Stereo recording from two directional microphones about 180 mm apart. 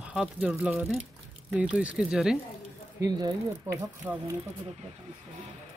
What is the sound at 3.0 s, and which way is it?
Speech, 20° right (ahead or behind).